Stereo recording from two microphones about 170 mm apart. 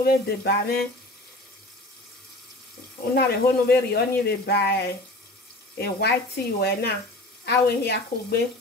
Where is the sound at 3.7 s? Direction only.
70° left (ahead or behind).